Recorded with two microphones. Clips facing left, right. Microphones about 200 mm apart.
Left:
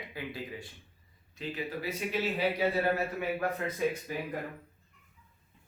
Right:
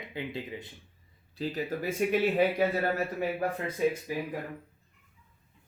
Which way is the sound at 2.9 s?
35° right (ahead or behind).